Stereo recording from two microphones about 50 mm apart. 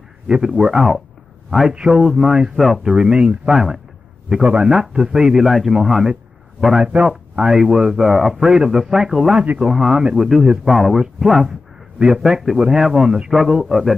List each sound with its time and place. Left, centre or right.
0.3 s speech: centre
2.6 s speech: centre
2.9 s speech: centre
4.4 s a man's voice: right; by 6.1 s centre
6.8 s speech: right; by 8.4 s centre
8.4 s speech: centre